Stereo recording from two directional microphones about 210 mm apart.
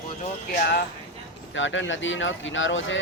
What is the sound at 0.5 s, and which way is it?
Speech, 50° left (ahead or behind).